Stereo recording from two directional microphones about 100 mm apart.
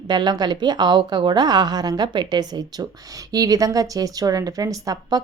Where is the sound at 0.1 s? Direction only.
45° right (ahead or behind).